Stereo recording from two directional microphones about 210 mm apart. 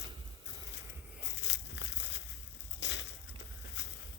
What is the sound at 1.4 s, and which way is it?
Crumpling, 60° left (ahead or behind).